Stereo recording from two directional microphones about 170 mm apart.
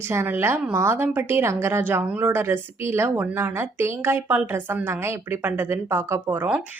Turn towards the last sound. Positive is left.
turn(degrees=-10)  # may be behind; listen again after turning